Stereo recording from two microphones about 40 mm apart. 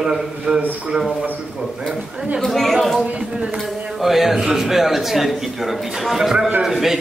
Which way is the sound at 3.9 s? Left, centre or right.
Centre.